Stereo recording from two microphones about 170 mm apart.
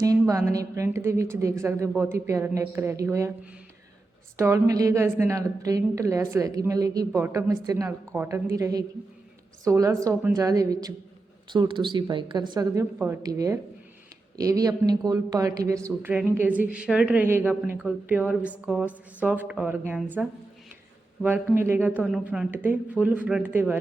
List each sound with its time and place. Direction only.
0.0 s a woman's voice: 20° right (ahead or behind)